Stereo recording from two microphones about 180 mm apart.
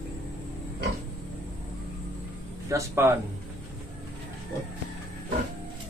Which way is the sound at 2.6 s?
15° right (ahead or behind).